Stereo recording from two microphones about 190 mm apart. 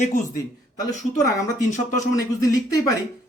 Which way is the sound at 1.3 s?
15° left (ahead or behind).